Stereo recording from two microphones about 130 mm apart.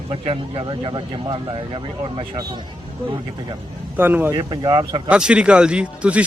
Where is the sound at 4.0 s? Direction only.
15° right (ahead or behind).